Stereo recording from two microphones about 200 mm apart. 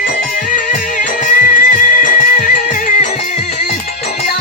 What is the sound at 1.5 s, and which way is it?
Music, 40° left (ahead or behind).